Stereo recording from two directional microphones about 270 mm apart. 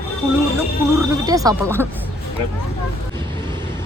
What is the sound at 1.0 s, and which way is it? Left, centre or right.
Speech, centre.